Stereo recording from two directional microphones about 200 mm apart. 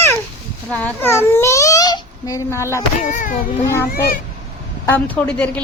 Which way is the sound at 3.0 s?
40° left (ahead or behind).